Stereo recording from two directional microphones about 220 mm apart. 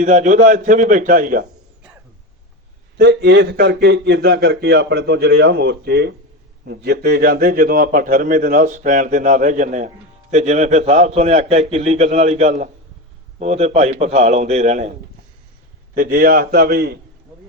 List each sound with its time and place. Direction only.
0.0 s a man's voice: 35° right (ahead or behind)
3.0 s a man's voice: 55° right (ahead or behind); by 14.9 s 30° right (ahead or behind)
16.0 s speech: 40° right (ahead or behind)